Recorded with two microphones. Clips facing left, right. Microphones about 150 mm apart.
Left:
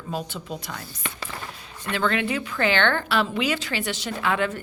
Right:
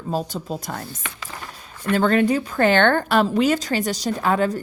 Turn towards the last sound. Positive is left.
turn(degrees=-40)  # may be behind; listen again after turning